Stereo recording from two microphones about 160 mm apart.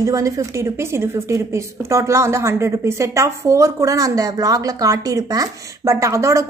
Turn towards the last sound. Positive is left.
turn(degrees=-20)  # may be behind; listen again after turning